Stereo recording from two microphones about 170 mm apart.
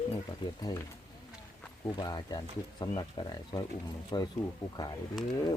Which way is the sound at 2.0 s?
25° left (ahead or behind).